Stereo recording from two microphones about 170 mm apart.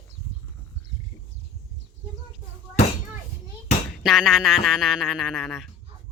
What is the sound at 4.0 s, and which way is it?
Speech, centre (ahead or behind).